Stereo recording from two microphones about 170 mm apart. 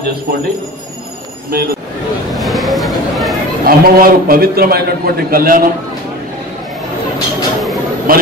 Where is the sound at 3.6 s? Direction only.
60° right (ahead or behind).